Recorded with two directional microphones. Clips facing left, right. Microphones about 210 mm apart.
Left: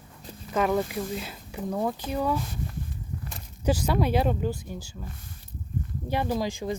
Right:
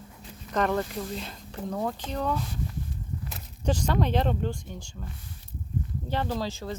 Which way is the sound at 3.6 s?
10° left (ahead or behind).